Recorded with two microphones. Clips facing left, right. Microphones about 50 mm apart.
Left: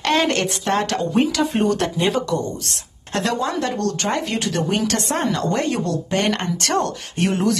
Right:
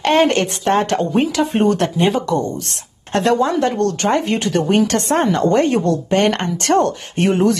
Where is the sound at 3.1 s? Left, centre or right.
Right.